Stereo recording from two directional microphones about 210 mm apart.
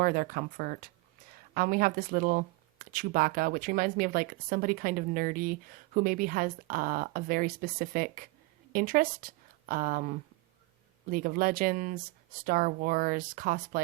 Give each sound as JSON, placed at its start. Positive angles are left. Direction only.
{"t": 0.0, "sound": "a woman's voice", "side_deg": -45}